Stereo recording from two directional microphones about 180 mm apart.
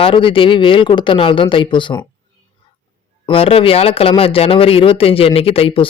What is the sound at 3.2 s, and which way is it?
Speech, 30° left (ahead or behind).